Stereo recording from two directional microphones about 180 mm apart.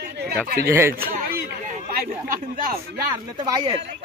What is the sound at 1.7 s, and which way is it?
Chatter, 55° right (ahead or behind).